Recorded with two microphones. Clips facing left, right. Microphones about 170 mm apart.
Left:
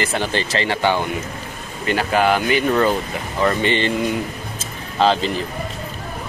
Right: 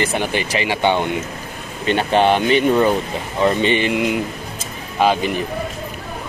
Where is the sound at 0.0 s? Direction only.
15° right (ahead or behind).